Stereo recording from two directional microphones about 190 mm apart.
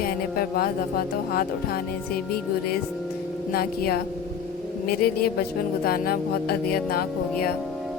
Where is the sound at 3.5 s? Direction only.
50° left (ahead or behind).